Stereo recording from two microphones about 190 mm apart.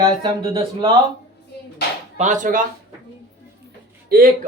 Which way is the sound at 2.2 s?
40° right (ahead or behind).